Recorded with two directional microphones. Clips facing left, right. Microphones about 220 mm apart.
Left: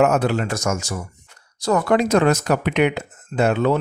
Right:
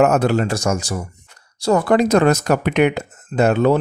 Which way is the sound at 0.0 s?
45° right (ahead or behind).